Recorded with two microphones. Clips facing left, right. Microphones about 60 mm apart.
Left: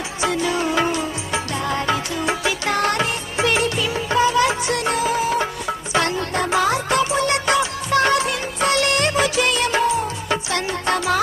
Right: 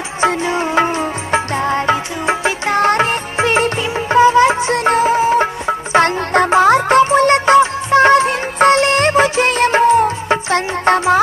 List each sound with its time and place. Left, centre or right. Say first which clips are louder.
0.2 s music: right 5 dB; right